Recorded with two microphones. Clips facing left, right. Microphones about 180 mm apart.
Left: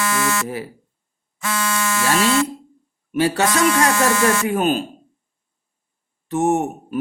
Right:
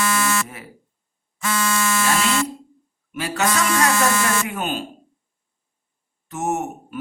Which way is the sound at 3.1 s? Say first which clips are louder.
Left 6 dB; 30° left (ahead or behind).